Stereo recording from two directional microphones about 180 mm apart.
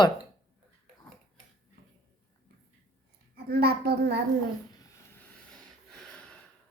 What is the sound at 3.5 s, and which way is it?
Speech, 60° right (ahead or behind).